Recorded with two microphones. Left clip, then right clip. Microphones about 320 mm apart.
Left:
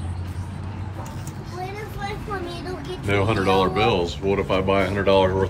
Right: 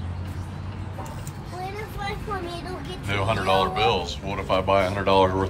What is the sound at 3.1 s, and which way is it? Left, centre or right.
Speech, centre.